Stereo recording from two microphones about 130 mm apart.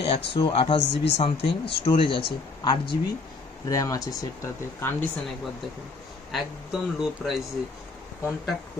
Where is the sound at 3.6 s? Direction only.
25° left (ahead or behind).